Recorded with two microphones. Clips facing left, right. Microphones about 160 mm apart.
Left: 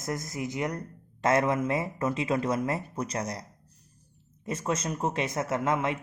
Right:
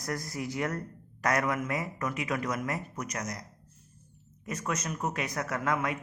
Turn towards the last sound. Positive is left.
turn(degrees=25)  # may be behind; listen again after turning